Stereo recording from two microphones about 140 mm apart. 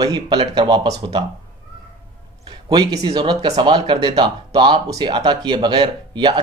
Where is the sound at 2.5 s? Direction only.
30° right (ahead or behind).